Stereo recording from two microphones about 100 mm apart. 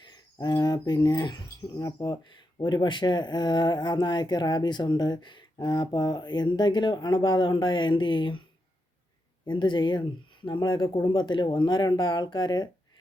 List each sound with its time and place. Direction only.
0.0 s speech: 45° left (ahead or behind)
9.5 s speech: 50° left (ahead or behind)